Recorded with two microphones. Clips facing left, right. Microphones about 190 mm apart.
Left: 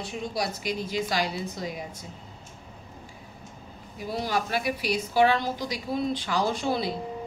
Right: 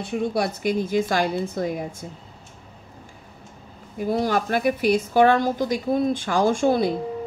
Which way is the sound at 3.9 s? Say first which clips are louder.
Right 7 dB; 50° right (ahead or behind).